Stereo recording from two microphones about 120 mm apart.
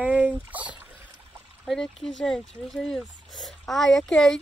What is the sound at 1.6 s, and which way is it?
Speech, 5° left (ahead or behind).